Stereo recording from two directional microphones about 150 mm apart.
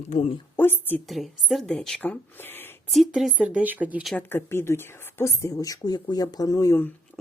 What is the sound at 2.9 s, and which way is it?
Speech, centre (ahead or behind).